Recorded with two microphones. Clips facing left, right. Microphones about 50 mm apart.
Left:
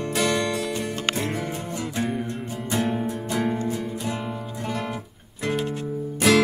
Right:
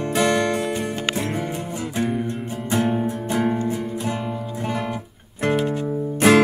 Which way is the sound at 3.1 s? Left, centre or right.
Right.